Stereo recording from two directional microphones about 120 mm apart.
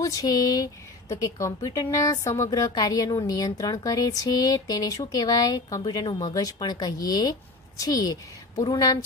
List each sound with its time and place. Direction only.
0.0 s speech: 30° left (ahead or behind)